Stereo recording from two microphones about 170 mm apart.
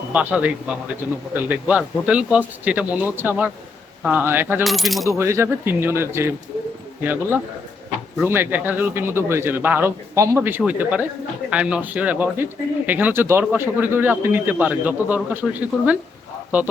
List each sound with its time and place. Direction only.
0.1 s speech: 10° right (ahead or behind)
4.6 s coin: centre (ahead or behind)
5.0 s speech: 15° right (ahead or behind)